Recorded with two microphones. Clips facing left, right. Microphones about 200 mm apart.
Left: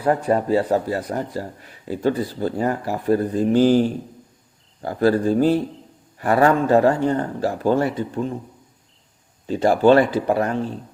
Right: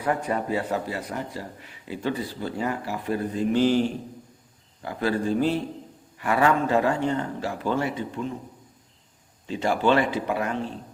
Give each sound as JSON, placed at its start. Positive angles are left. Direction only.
{"t": 0.3, "sound": "a man's voice", "side_deg": 35}
{"t": 9.5, "sound": "a man's voice", "side_deg": 40}